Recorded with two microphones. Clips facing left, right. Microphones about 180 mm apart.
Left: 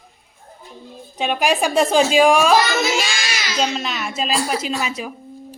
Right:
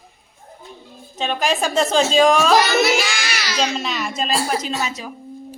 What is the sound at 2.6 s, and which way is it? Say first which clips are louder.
Child singing: right 3 dB; 65° right (ahead or behind).